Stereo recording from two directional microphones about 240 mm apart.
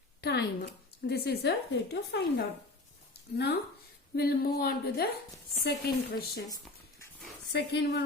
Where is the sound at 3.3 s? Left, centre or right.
Left.